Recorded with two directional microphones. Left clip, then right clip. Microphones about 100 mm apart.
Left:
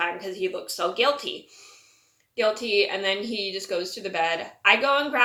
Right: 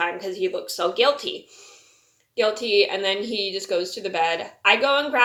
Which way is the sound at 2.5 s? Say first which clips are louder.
Right 3 dB; 15° right (ahead or behind).